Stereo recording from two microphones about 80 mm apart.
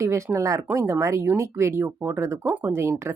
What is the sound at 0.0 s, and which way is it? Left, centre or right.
Speech, right.